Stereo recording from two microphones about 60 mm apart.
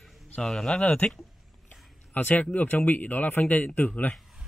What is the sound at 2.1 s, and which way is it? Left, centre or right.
A man's voice, left.